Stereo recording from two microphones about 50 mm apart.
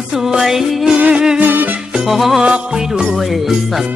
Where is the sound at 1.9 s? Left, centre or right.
Centre.